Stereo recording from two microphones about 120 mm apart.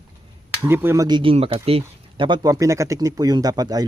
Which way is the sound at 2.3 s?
35° right (ahead or behind).